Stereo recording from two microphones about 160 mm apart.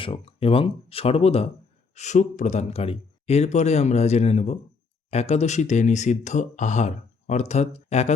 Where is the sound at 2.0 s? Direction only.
50° left (ahead or behind).